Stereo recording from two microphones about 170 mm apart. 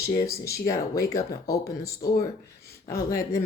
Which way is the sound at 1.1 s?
20° left (ahead or behind).